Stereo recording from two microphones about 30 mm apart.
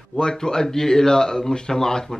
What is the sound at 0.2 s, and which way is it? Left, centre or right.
Speech, left.